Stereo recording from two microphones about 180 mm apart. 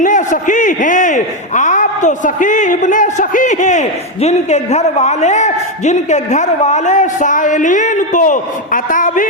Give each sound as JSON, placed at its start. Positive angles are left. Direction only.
{"t": 0.0, "sound": "a man's voice", "side_deg": 45}